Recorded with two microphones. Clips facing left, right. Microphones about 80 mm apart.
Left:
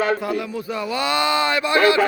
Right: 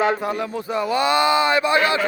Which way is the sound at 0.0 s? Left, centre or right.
Right.